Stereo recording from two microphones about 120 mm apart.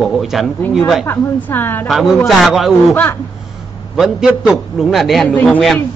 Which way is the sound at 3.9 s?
5° right (ahead or behind).